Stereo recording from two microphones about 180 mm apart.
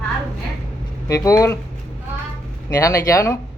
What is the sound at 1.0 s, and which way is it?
Speech, 15° left (ahead or behind).